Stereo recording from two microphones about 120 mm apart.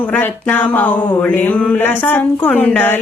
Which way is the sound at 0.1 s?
15° left (ahead or behind).